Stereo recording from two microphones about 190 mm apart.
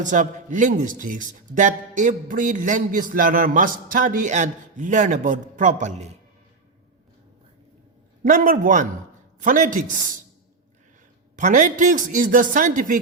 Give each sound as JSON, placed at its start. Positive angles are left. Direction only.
{"t": 0.0, "sound": "speech", "side_deg": -40}
{"t": 8.2, "sound": "speech", "side_deg": -45}
{"t": 11.3, "sound": "speech", "side_deg": -40}